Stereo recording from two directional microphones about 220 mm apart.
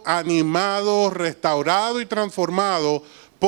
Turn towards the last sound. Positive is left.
turn(degrees=-30)  # may be behind; listen again after turning